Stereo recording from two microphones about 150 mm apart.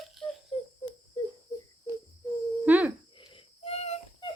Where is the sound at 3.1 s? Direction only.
35° left (ahead or behind).